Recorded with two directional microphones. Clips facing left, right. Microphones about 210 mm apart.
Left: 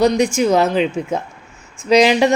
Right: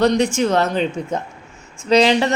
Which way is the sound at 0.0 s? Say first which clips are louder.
Left 2 dB; 10° left (ahead or behind).